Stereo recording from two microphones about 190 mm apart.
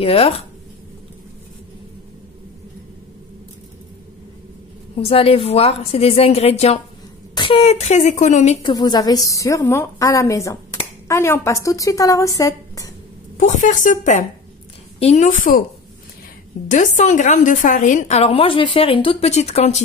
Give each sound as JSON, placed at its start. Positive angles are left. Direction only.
{"t": 0.0, "sound": "a woman's voice", "side_deg": 30}
{"t": 4.9, "sound": "a woman's voice", "side_deg": 30}
{"t": 8.7, "sound": "a woman's voice", "side_deg": 20}
{"t": 13.4, "sound": "a woman's voice", "side_deg": 40}
{"t": 16.6, "sound": "a woman's voice", "side_deg": 40}